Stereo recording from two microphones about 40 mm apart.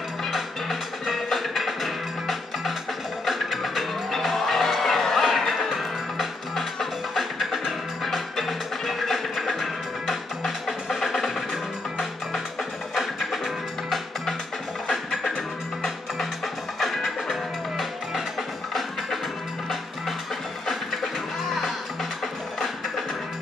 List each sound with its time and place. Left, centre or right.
0.2 s music: centre
12.9 s music: centre
14.9 s music: centre
16.8 s music: centre